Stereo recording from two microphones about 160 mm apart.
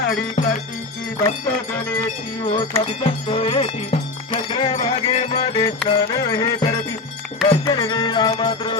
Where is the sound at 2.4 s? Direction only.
35° left (ahead or behind).